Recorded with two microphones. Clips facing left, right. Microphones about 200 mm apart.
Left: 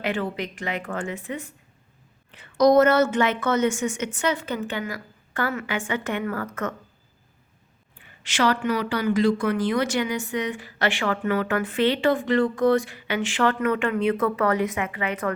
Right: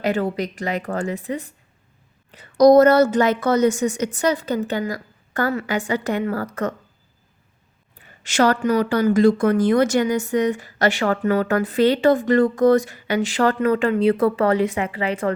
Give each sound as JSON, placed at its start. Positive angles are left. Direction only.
{"t": 0.0, "sound": "a woman's voice", "side_deg": -40}
{"t": 7.9, "sound": "a woman's voice", "side_deg": -45}